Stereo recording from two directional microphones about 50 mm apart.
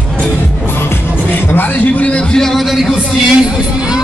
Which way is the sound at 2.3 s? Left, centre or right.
Centre.